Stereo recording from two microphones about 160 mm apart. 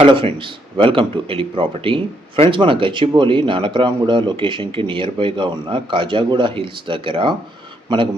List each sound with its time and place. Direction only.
0.0 s speech: 35° right (ahead or behind)